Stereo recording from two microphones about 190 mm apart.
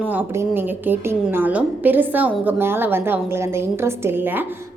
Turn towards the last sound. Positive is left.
turn(degrees=-10)  # may be behind; listen again after turning